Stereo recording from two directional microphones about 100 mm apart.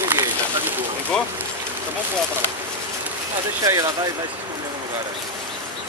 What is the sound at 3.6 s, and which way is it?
Speech, 35° right (ahead or behind).